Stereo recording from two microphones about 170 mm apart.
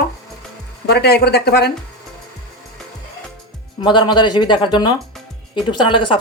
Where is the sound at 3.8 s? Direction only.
25° left (ahead or behind).